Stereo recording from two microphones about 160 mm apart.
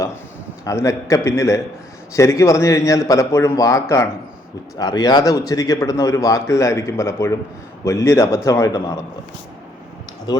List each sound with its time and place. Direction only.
0.6 s speech: 20° left (ahead or behind)
10.3 s speech: 25° left (ahead or behind)